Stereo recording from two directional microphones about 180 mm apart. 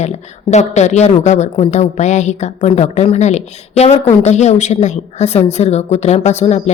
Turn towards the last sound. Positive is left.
turn(degrees=40)  # may be behind; listen again after turning